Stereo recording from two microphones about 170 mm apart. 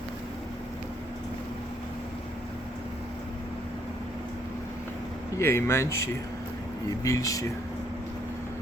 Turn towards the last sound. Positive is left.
turn(degrees=20)  # may be behind; listen again after turning